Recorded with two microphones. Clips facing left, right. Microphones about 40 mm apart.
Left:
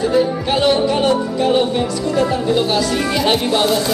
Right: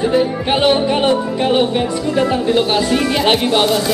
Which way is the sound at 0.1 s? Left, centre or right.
Right.